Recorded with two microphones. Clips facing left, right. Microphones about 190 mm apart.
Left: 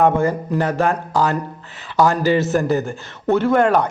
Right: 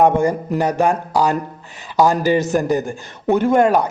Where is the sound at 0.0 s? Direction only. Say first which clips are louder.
Right 2 dB; 15° right (ahead or behind).